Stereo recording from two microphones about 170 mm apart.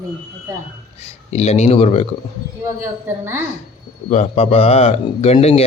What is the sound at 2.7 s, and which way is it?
Speech, 15° right (ahead or behind).